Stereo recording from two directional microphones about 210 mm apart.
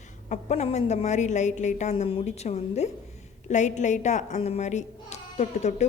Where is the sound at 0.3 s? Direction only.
35° left (ahead or behind).